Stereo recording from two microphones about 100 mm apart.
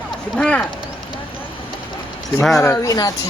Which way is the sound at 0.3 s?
10° left (ahead or behind).